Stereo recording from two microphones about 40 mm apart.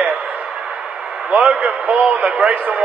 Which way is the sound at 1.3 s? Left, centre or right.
Right.